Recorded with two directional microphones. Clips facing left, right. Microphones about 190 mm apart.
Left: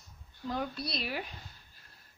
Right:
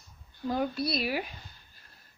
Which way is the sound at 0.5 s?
5° right (ahead or behind).